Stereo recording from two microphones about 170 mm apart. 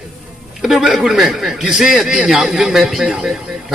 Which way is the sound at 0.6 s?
5° right (ahead or behind).